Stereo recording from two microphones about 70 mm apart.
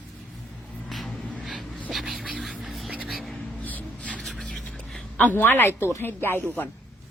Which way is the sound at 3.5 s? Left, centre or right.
Left.